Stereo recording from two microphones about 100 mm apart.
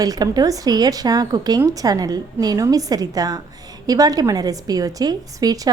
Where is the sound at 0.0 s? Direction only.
40° right (ahead or behind).